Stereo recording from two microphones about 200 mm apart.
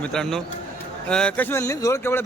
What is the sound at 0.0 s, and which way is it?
A man's voice, 5° left (ahead or behind).